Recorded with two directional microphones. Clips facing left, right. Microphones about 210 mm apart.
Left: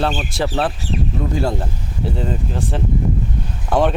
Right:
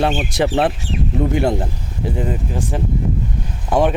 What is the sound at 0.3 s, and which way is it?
Speech, 20° right (ahead or behind).